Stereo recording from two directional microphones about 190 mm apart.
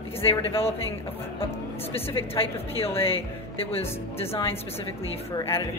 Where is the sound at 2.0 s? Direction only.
30° left (ahead or behind).